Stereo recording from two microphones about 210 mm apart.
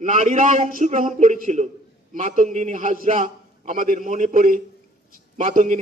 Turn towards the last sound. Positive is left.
turn(degrees=-40)  # may be behind; listen again after turning